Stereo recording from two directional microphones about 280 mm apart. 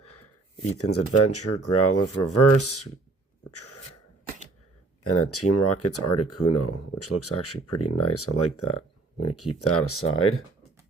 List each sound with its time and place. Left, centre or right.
0.8 s speech: left
5.0 s speech: left